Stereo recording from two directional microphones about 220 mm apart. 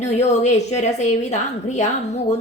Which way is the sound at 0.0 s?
30° left (ahead or behind).